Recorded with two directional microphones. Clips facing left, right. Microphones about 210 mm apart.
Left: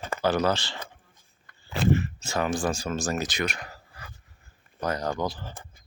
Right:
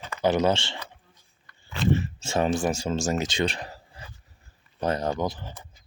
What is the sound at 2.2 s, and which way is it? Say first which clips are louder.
Speech: right 3 dB; 25° right (ahead or behind).